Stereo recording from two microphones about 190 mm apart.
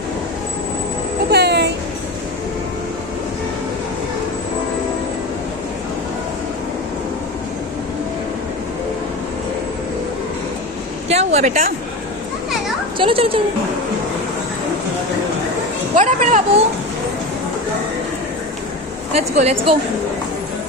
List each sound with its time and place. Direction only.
1.3 s music: 60° right (ahead or behind)
11.1 s a sound: 35° right (ahead or behind)
13.0 s speech: 30° right (ahead or behind)
16.0 s speech: 40° right (ahead or behind)
19.1 s speech: 35° right (ahead or behind)